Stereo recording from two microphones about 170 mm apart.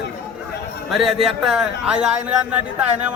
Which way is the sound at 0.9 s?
Centre (ahead or behind).